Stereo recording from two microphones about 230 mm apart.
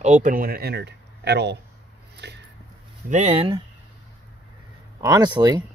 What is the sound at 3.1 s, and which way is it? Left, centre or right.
Speech, right.